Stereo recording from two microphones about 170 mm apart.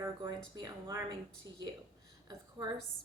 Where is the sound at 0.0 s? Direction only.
25° right (ahead or behind).